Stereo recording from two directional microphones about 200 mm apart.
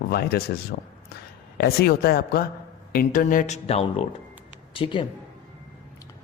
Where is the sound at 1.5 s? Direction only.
50° left (ahead or behind); by 5.0 s 25° left (ahead or behind).